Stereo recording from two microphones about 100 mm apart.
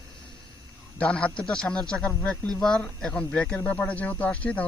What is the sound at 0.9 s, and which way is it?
A man's voice, 10° left (ahead or behind).